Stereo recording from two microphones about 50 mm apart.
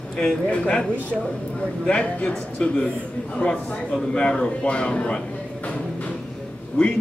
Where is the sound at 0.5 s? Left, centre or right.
Left.